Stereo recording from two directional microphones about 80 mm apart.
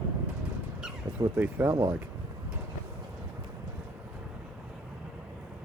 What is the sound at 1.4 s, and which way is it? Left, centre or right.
Speech, right.